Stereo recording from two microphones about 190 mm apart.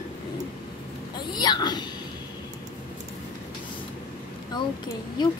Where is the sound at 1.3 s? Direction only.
20° left (ahead or behind).